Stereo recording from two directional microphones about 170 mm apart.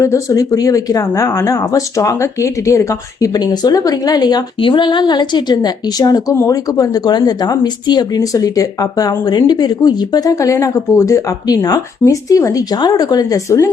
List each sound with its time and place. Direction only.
0.0 s speech: 20° left (ahead or behind)